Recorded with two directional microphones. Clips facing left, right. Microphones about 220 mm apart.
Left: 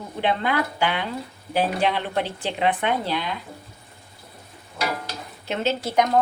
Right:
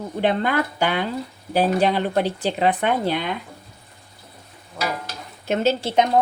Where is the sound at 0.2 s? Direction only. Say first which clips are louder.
Right 3 dB; 45° right (ahead or behind).